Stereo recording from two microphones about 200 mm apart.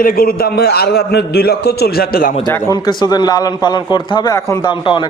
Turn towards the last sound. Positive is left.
turn(degrees=25)  # may be behind; listen again after turning